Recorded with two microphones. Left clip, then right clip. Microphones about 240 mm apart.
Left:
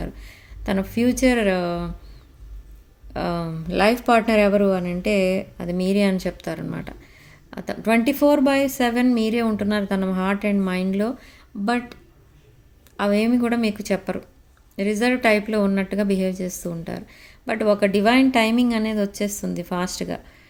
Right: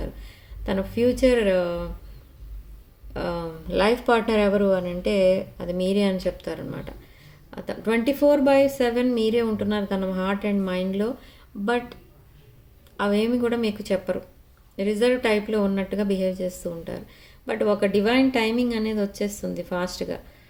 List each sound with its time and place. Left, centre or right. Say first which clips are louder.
0.0 s speech: left 2 dB; left
3.1 s a woman's voice: left 2 dB; left
13.0 s a woman's voice: left 2 dB; left